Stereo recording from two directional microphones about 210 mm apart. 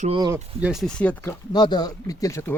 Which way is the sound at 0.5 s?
5° right (ahead or behind).